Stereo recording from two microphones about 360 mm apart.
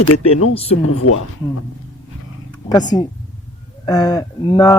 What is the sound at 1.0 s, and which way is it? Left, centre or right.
Speech, left.